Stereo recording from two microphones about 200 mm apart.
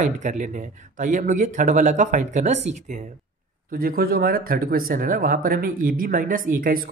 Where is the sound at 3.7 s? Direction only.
45° right (ahead or behind).